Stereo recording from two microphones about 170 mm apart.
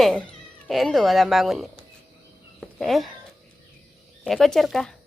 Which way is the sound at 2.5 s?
Centre (ahead or behind).